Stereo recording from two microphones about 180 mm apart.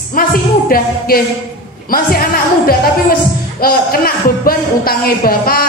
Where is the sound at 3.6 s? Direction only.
55° left (ahead or behind).